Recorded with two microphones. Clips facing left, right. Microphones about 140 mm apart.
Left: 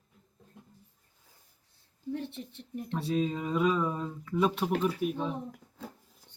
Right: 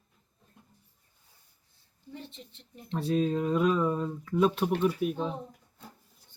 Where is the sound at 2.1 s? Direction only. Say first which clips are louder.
Left 9 dB; 70° left (ahead or behind).